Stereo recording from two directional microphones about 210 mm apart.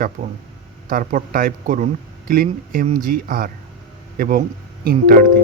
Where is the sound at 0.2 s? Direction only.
45° right (ahead or behind).